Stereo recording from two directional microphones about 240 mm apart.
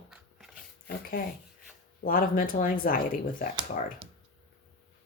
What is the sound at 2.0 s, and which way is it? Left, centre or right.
Speech, left.